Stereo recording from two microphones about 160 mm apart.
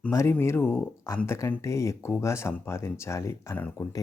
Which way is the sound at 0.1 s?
15° left (ahead or behind).